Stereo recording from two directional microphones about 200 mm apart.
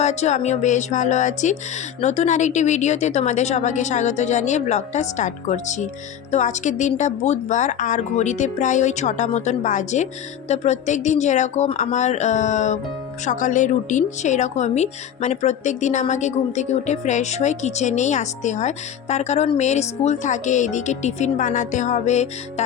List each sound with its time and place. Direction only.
0.0 s a woman's voice: 35° left (ahead or behind)